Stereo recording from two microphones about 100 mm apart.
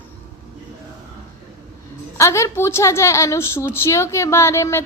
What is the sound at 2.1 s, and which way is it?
A woman's voice, 30° left (ahead or behind).